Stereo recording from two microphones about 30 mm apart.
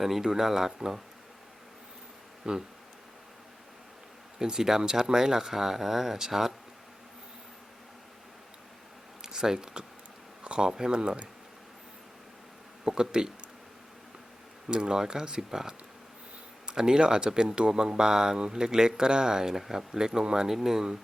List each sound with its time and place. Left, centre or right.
0.0 s speech: centre
2.4 s speech: right
4.4 s speech: right
5.5 s speech: centre
9.2 s speech: centre
10.4 s speech: right
10.7 s speech: right
12.8 s speech: right
14.7 s speech: right
15.4 s speech: centre
19.9 s speech: right